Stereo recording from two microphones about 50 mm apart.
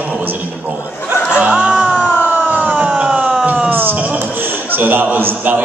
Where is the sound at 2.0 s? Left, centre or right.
Left.